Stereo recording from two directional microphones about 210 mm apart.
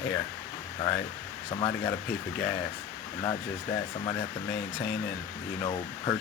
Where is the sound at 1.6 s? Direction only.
20° left (ahead or behind).